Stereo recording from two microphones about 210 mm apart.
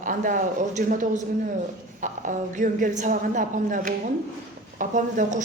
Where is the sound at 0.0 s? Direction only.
40° right (ahead or behind).